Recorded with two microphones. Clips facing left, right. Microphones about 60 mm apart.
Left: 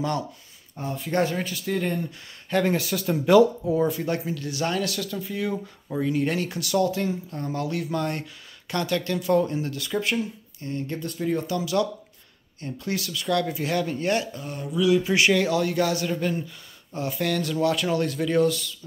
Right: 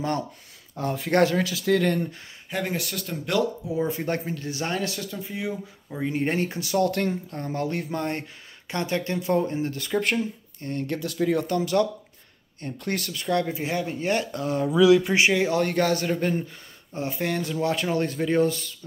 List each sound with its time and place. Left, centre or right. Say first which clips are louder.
0.7 s speech: right 4 dB; right
2.5 s speech: left 6 dB; centre
3.8 s speech: left 2 dB; right
5.9 s speech: left 1 dB; right
6.9 s speech: right 1 dB; right
7.2 s speech: even; right
10.6 s speech: right 2 dB; right
11.0 s speech: right 3 dB; right
11.4 s speech: right 2 dB; right; by 14.1 s centre
14.4 s speech: right 5 dB; right
15.1 s speech: even; right
15.5 s speech: right 1 dB; right